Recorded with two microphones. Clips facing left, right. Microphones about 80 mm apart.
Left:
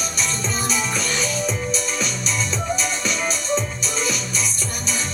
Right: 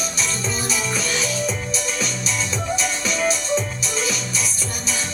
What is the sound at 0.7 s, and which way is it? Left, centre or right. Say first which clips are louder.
Music: right 1 dB; centre.